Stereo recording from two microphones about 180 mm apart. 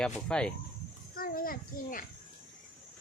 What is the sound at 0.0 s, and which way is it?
Speech, 5° left (ahead or behind).